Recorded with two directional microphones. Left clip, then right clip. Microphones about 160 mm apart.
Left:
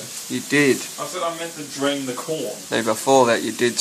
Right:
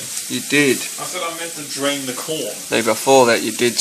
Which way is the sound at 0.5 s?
10° right (ahead or behind).